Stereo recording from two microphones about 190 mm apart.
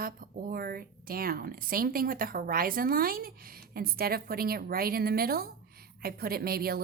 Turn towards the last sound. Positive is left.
turn(degrees=-50)  # may be behind; listen again after turning